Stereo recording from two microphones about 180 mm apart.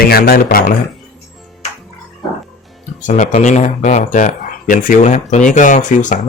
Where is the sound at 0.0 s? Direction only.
55° left (ahead or behind).